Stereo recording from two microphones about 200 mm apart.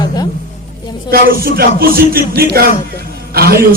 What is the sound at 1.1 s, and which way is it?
A man's voice, 45° right (ahead or behind).